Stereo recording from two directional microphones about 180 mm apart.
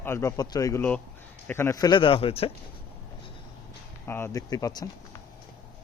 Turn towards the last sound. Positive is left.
turn(degrees=20)  # may be behind; listen again after turning